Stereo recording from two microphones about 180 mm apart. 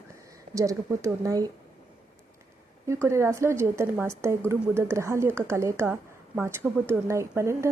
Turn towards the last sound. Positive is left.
turn(degrees=-15)  # may be behind; listen again after turning